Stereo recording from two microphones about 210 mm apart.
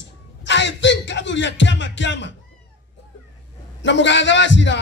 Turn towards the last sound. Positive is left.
turn(degrees=60)  # may be behind; listen again after turning